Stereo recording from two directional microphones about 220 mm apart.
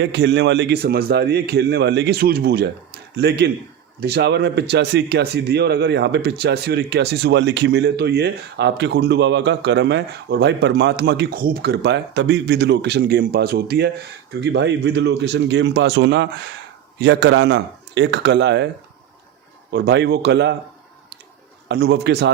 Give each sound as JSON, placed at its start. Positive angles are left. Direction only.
{"t": 0.0, "sound": "speech", "side_deg": -50}
{"t": 19.7, "sound": "speech", "side_deg": -50}
{"t": 21.7, "sound": "speech", "side_deg": -50}